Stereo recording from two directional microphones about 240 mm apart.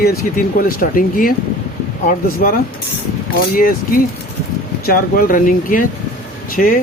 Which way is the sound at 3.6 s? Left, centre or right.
Left.